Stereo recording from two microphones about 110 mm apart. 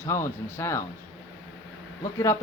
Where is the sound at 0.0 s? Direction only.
20° left (ahead or behind).